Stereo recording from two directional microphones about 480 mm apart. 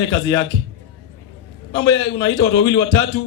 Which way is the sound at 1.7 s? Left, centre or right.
Left.